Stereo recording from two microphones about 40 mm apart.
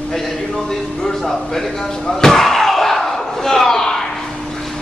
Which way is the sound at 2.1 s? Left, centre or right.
Centre.